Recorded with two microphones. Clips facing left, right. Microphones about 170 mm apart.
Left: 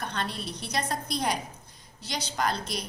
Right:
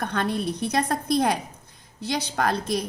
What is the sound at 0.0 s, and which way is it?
A woman's voice, 55° right (ahead or behind).